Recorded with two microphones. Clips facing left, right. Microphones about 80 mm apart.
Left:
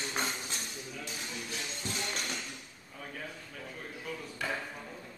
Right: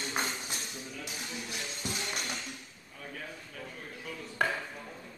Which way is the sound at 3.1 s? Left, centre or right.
Centre.